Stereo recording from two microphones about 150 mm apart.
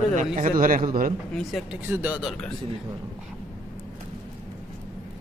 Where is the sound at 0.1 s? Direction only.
55° right (ahead or behind).